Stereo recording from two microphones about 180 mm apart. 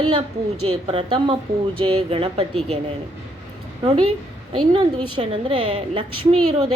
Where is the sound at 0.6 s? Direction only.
30° right (ahead or behind).